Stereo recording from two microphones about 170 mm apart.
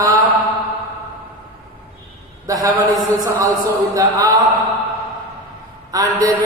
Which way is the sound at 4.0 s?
20° right (ahead or behind).